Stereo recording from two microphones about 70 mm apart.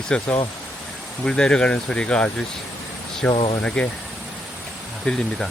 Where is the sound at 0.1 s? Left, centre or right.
Centre.